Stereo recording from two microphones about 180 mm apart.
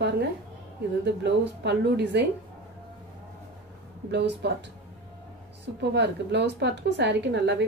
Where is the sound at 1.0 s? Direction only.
70° right (ahead or behind).